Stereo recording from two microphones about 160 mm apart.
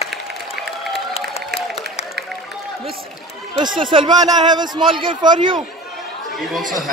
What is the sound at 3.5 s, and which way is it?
A man's voice, 30° right (ahead or behind).